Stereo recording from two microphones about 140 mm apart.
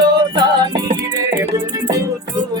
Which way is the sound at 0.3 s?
30° right (ahead or behind).